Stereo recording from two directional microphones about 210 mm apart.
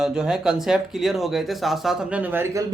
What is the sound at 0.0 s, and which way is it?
Speech, 5° right (ahead or behind).